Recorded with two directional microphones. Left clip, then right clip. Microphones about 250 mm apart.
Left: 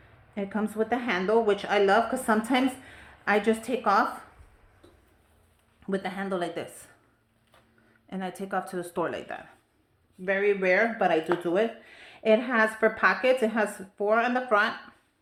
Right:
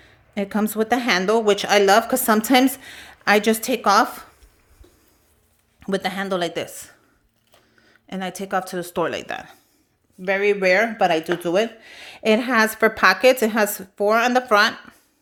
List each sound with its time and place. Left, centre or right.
0.3 s a woman's voice: right
5.8 s speech: right
8.0 s a woman's voice: right